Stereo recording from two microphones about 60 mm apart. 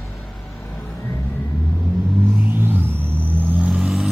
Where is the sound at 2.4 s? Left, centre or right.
Right.